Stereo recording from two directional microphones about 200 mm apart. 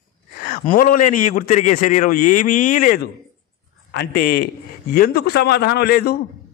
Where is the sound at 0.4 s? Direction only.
45° left (ahead or behind).